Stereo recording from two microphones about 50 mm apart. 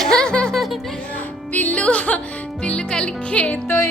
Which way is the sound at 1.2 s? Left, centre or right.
Left.